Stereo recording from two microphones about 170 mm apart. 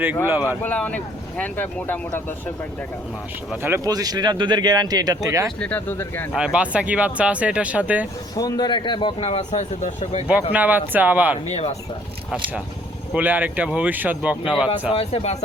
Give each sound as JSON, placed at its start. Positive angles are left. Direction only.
{"t": 0.3, "sound": "speech", "side_deg": -10}
{"t": 0.6, "sound": "speech", "side_deg": 10}
{"t": 3.6, "sound": "speech", "side_deg": -15}
{"t": 5.5, "sound": "speech", "side_deg": 10}
{"t": 6.3, "sound": "speech", "side_deg": -5}
{"t": 8.4, "sound": "speech", "side_deg": 25}
{"t": 10.5, "sound": "speech", "side_deg": -10}
{"t": 11.4, "sound": "speech", "side_deg": 40}
{"t": 13.1, "sound": "speech", "side_deg": -10}
{"t": 14.9, "sound": "speech", "side_deg": 35}